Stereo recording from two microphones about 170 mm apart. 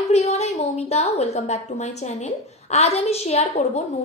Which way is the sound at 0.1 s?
40° left (ahead or behind).